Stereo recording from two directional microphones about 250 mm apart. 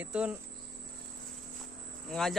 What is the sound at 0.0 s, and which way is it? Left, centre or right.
Speech, centre.